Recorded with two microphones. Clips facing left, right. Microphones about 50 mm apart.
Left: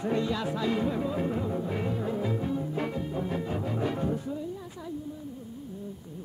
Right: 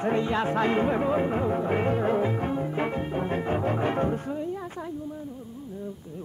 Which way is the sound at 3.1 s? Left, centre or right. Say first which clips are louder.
Right 4 dB; right.